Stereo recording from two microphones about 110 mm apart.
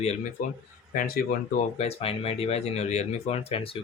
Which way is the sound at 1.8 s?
65° left (ahead or behind).